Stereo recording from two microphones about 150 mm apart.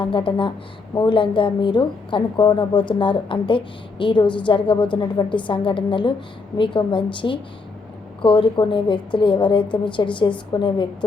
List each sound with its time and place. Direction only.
0.0 s a woman's voice: 35° left (ahead or behind)